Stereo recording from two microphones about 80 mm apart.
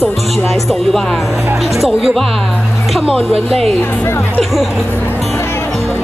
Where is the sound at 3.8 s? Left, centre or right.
Left.